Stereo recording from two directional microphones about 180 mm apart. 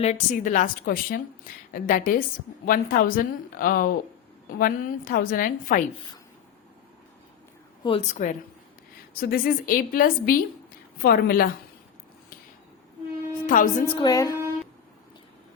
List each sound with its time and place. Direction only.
0.0 s a woman's voice: 40° left (ahead or behind)
7.9 s a woman's voice: 35° left (ahead or behind); by 11.5 s 55° left (ahead or behind)
13.5 s a woman's voice: 50° left (ahead or behind)
13.8 s a woman's voice: 30° left (ahead or behind)
14.1 s speech: 15° left (ahead or behind)